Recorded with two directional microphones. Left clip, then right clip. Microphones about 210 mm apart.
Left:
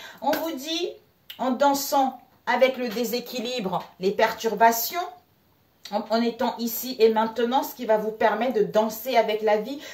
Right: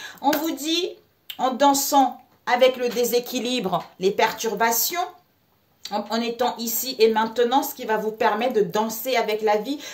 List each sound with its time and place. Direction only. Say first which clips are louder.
0.0 s a woman's voice: right 3 dB; 50° right (ahead or behind)